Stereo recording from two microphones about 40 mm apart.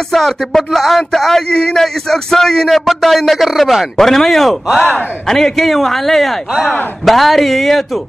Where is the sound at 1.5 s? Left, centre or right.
Left.